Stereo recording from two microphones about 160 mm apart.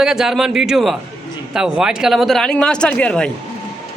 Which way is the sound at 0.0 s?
Centre (ahead or behind).